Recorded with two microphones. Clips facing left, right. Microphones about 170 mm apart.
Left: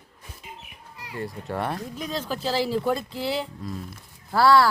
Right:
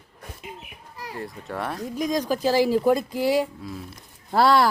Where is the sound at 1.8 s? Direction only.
10° right (ahead or behind).